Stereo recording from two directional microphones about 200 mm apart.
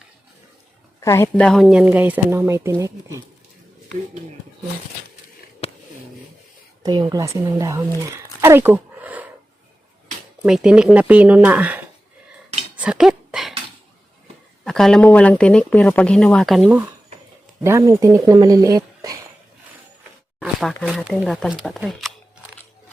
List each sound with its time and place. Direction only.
0.9 s speech: 15° left (ahead or behind)
1.5 s speech: centre (ahead or behind)
5.6 s a sound: 30° left (ahead or behind)
6.8 s a woman's voice: 20° right (ahead or behind)
10.4 s speech: 5° right (ahead or behind)
12.7 s a sound: 5° right (ahead or behind)
14.6 s speech: 5° left (ahead or behind)
17.6 s speech: 15° right (ahead or behind)
20.4 s speech: centre (ahead or behind)